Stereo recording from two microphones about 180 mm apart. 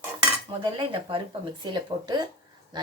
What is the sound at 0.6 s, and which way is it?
Speech, 30° right (ahead or behind).